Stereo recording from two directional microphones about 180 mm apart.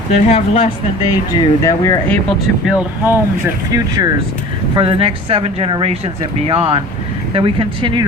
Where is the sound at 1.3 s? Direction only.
20° left (ahead or behind).